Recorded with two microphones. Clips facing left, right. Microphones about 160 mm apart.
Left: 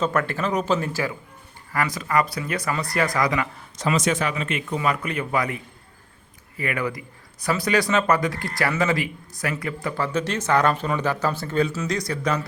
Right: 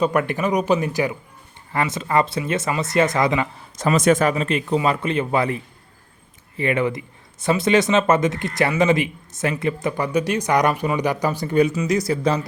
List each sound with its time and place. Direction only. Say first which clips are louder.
0.0 s speech: right 4 dB; 15° right (ahead or behind)
3.8 s speech: right 6 dB; 50° right (ahead or behind); by 5.5 s 25° right (ahead or behind)
6.6 s speech: right 6 dB; 25° right (ahead or behind)
11.9 s speech: right 4 dB; 25° right (ahead or behind)